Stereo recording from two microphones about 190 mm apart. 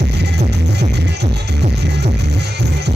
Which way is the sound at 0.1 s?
60° right (ahead or behind).